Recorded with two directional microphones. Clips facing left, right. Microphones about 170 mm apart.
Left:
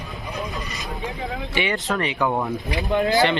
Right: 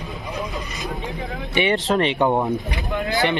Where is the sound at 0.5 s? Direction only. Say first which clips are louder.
Right 2 dB; 20° right (ahead or behind).